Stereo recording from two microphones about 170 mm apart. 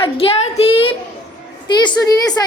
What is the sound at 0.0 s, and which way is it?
A child's voice, 35° left (ahead or behind).